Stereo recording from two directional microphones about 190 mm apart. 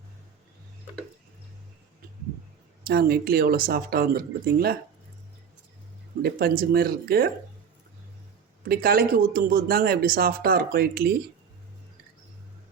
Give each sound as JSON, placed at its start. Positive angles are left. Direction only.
{"t": 2.8, "sound": "speech", "side_deg": -50}
{"t": 6.2, "sound": "speech", "side_deg": -50}
{"t": 8.6, "sound": "speech", "side_deg": -50}